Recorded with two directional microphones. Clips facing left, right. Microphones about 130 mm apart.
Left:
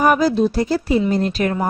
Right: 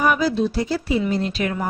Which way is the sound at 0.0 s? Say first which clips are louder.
Left 4 dB; 45° left (ahead or behind).